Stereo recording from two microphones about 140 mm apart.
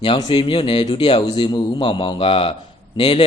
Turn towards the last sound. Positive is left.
turn(degrees=40)  # may be behind; listen again after turning